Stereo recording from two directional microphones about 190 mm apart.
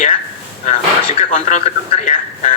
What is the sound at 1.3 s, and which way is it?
A man's voice, 40° left (ahead or behind).